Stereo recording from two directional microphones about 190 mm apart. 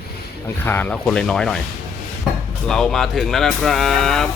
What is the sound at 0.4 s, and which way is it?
Speech, 10° left (ahead or behind).